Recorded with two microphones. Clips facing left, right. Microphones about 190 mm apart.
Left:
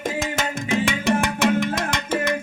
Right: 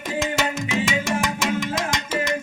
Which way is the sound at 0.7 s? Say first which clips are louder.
Left 7 dB; 55° left (ahead or behind).